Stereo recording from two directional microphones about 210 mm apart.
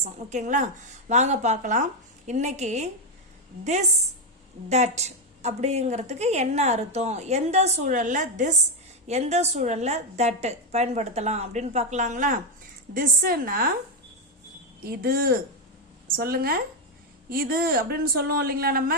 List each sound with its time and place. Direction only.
0.0 s a woman's voice: 35° right (ahead or behind)
14.8 s speech: 45° right (ahead or behind)